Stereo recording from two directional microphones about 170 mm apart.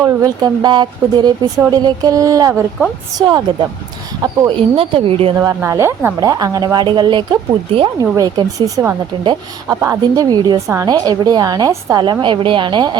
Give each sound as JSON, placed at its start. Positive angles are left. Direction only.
{"t": 0.0, "sound": "speech", "side_deg": -20}
{"t": 5.4, "sound": "speech", "side_deg": -15}
{"t": 9.2, "sound": "speech", "side_deg": -30}